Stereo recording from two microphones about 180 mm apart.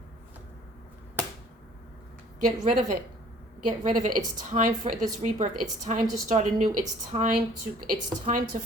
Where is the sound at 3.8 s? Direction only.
50° right (ahead or behind).